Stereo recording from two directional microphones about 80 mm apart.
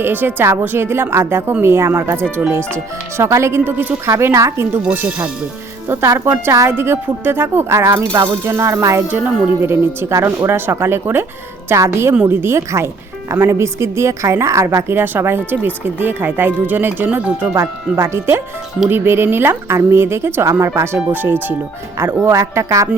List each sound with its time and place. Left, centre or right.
0.0 s a woman's voice: right
4.8 s speech: centre
6.1 s speech: right
6.7 s speech: right
9.0 s a woman's voice: right
17.5 s a woman's voice: right